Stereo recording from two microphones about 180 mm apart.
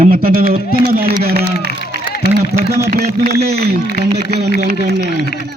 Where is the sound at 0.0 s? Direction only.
55° right (ahead or behind).